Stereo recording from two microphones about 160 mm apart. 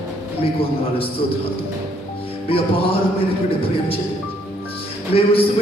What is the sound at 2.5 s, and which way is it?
A man's voice, 35° left (ahead or behind).